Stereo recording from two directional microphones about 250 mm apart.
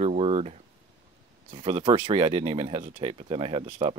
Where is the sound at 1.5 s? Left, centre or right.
Right.